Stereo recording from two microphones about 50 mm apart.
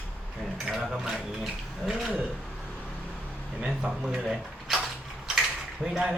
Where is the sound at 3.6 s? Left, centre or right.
Centre.